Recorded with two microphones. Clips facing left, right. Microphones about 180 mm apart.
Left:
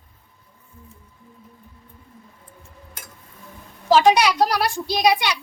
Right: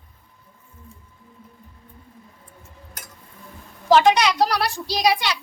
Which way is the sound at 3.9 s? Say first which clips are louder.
Even; 10° left (ahead or behind).